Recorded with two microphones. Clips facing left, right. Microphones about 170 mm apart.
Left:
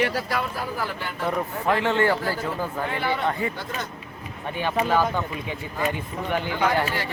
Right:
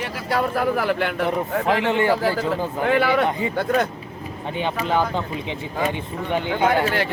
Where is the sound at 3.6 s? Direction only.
60° right (ahead or behind).